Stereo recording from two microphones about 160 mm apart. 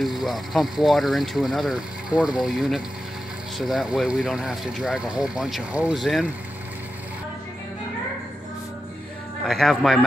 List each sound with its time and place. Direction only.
0.0 s speech: centre (ahead or behind)
9.5 s speech: centre (ahead or behind)